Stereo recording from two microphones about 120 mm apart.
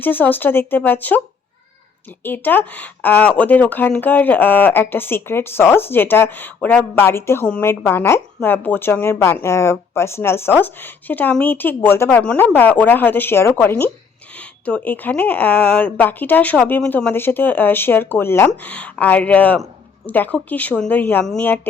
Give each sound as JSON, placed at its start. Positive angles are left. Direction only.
{"t": 0.0, "sound": "speech", "side_deg": 15}
{"t": 2.2, "sound": "a woman's voice", "side_deg": 15}